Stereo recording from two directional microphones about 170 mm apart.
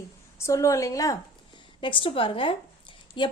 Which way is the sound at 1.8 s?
30° left (ahead or behind).